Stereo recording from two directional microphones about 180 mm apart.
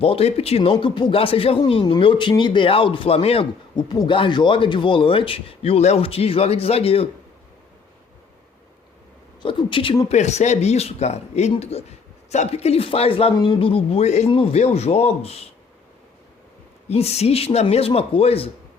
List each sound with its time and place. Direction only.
0.0 s speech: 35° left (ahead or behind)
9.4 s a woman's voice: 25° left (ahead or behind)
10.1 s speech: 40° left (ahead or behind)
16.9 s speech: 35° left (ahead or behind)